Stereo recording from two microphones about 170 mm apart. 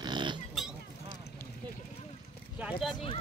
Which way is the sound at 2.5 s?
5° right (ahead or behind).